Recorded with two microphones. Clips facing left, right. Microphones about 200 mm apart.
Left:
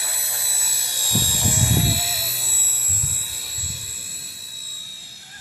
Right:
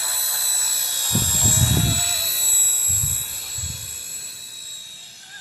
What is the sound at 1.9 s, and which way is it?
Jet engine, 10° left (ahead or behind).